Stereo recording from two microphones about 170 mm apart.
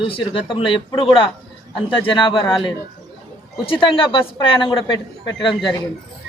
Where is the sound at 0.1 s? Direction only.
30° left (ahead or behind).